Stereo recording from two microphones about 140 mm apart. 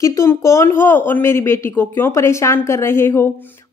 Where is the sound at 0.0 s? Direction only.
20° left (ahead or behind).